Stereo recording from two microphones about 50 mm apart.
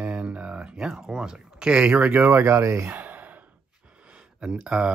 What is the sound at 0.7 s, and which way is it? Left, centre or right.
Speech, centre.